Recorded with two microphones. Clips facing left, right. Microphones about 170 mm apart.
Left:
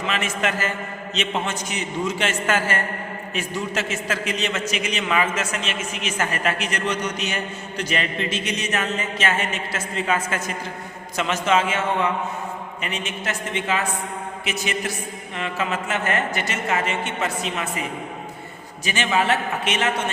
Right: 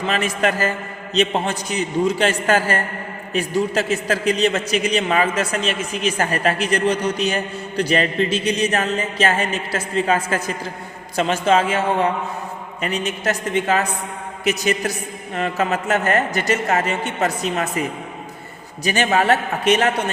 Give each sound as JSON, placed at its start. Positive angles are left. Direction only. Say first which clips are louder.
{"t": 0.1, "sound": "a man's voice", "louder": "right 5 dB", "side_deg": -35}
{"t": 18.9, "sound": "a man's voice", "louder": "right 4 dB", "side_deg": -40}